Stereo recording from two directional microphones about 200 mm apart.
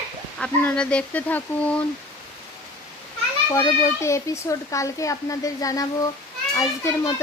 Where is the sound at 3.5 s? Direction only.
15° left (ahead or behind).